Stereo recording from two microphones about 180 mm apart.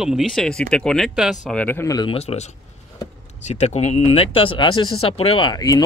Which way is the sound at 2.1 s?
35° left (ahead or behind).